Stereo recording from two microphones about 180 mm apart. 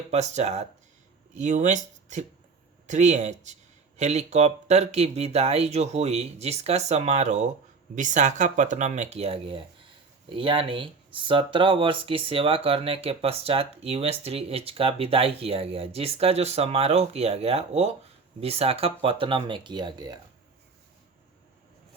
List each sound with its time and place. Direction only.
0.1 s speech: 40° right (ahead or behind); by 20.1 s 25° right (ahead or behind)